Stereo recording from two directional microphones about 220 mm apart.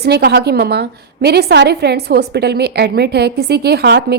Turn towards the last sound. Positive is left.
turn(degrees=-50)  # may be behind; listen again after turning